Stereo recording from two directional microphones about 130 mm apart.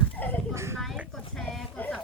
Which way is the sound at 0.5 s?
20° right (ahead or behind).